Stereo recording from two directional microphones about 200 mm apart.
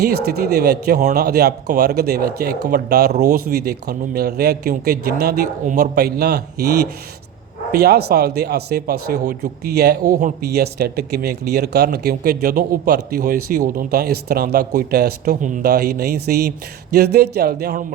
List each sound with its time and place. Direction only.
0.0 s speech: 50° right (ahead or behind)
7.7 s speech: 55° right (ahead or behind)